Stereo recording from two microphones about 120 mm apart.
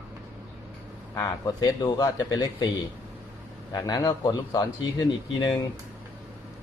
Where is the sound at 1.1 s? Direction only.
25° left (ahead or behind).